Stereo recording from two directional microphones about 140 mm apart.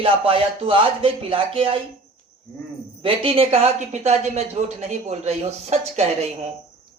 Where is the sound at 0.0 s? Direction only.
40° right (ahead or behind).